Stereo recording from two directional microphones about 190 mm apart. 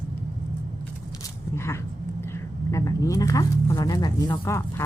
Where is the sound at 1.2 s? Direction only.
15° left (ahead or behind).